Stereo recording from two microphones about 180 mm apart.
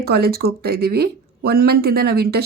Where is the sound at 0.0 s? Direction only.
60° right (ahead or behind).